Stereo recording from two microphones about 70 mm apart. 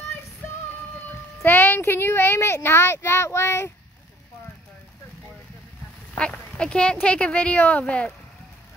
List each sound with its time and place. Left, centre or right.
1.4 s a child's voice: left
6.1 s speech: centre